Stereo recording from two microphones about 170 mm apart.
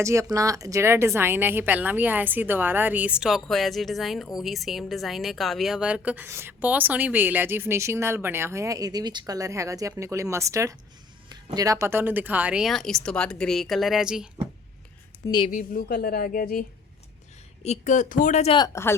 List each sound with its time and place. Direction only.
0.0 s speech: 20° right (ahead or behind)
15.4 s a woman's voice: 55° left (ahead or behind)
17.6 s speech: 45° left (ahead or behind)
18.5 s speech: 20° left (ahead or behind)